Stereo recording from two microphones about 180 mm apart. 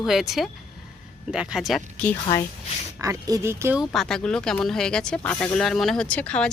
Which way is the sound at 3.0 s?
20° right (ahead or behind).